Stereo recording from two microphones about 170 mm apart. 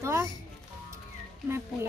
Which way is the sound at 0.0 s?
15° right (ahead or behind).